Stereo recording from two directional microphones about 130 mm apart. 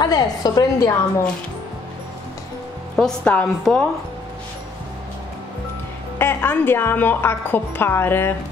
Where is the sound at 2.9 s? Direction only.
5° left (ahead or behind).